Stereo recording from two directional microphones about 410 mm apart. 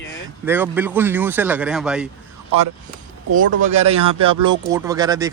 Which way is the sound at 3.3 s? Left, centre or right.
Centre.